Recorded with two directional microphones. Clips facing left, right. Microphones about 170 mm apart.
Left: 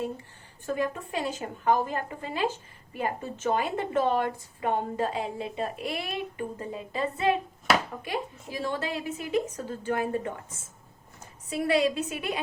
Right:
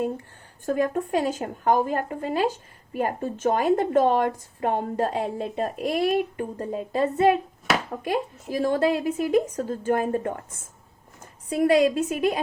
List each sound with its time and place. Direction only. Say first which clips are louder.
0.6 s a woman's voice: right 6 dB; 50° right (ahead or behind)
11.4 s a woman's voice: right 6 dB; 45° right (ahead or behind)